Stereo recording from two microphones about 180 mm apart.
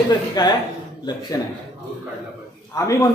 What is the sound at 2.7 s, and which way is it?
Speech, 20° left (ahead or behind).